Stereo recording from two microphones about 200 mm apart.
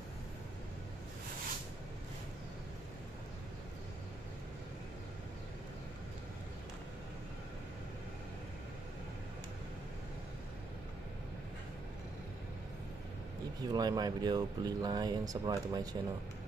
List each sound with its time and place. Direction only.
13.6 s speech: 20° right (ahead or behind)